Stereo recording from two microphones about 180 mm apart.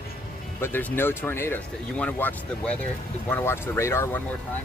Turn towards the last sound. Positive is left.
turn(degrees=10)  # may be behind; listen again after turning